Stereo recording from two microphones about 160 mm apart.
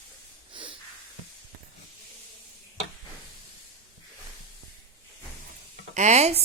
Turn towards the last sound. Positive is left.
turn(degrees=-40)  # may be behind; listen again after turning